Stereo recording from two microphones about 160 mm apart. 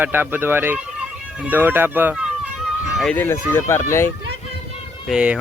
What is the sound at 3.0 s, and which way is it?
Speech, 10° left (ahead or behind).